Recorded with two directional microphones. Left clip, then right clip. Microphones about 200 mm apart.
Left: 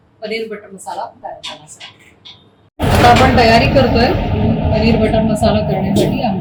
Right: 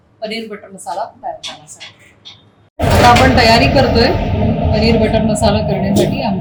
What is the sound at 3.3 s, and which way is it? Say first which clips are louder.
Speech: even; 40° right (ahead or behind).